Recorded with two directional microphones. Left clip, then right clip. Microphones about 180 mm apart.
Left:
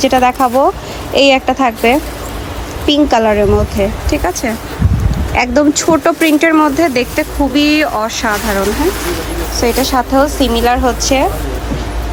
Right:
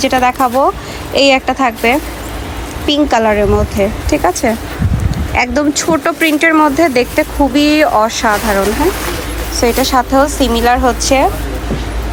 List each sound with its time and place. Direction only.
0.0 s speech: 15° left (ahead or behind)
5.3 s speech: 15° left (ahead or behind)